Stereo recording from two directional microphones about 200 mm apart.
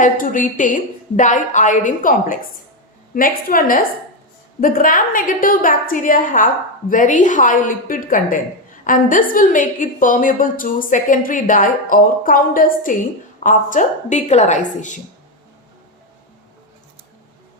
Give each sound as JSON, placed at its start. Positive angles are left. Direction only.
{"t": 0.0, "sound": "a woman's voice", "side_deg": 40}